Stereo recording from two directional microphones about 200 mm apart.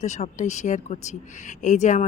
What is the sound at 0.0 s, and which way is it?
Speech, 35° left (ahead or behind).